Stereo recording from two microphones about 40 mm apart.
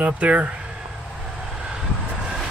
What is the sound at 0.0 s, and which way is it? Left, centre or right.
Speech, right.